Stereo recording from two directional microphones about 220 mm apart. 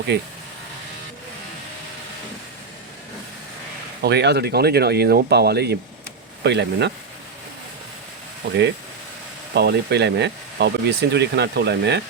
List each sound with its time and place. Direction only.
0.1 s speech: 50° right (ahead or behind)
4.0 s speech: 50° right (ahead or behind)
9.6 s speech: 50° right (ahead or behind)